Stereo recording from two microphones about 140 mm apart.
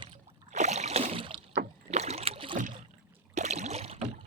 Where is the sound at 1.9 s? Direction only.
50° right (ahead or behind).